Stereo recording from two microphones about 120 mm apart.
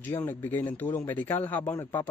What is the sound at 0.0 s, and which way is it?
Speech, 15° left (ahead or behind).